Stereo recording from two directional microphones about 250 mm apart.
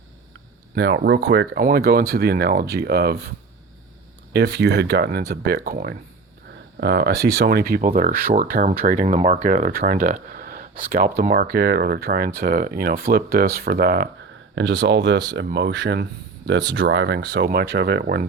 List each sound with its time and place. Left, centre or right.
0.8 s speech: right
4.3 s speech: right
10.3 s a sound: right
11.2 s speech: right